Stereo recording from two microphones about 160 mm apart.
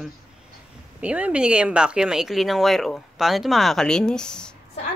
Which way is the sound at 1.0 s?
10° right (ahead or behind).